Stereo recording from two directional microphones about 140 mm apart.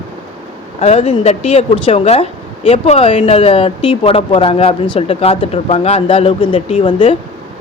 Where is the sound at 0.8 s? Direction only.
50° left (ahead or behind).